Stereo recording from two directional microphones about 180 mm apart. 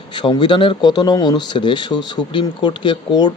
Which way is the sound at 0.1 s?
25° left (ahead or behind).